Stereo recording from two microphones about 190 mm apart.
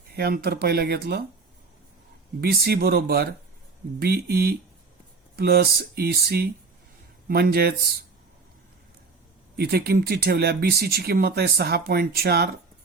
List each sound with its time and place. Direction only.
0.2 s speech: 55° right (ahead or behind)
2.4 s speech: 55° right (ahead or behind)
9.6 s speech: 55° right (ahead or behind)